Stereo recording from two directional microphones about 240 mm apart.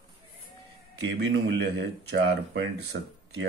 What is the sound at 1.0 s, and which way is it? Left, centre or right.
Speech, right.